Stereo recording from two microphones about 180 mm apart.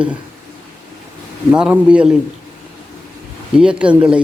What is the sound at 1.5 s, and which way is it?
Speech, 5° right (ahead or behind).